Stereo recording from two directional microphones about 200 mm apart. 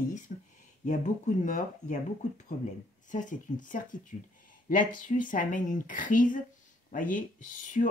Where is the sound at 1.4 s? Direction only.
40° left (ahead or behind).